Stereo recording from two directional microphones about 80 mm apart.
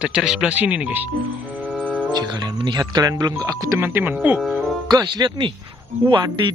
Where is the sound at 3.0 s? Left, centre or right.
Right.